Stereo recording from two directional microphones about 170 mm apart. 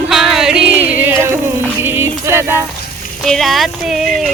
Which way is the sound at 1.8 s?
15° right (ahead or behind).